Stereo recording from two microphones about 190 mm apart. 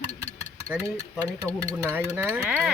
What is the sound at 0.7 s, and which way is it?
Speech, 10° right (ahead or behind).